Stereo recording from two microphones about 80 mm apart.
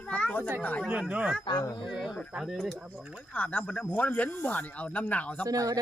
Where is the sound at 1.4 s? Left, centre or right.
Left.